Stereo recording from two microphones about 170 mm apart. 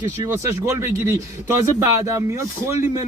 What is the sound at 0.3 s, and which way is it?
A man's voice, 15° right (ahead or behind).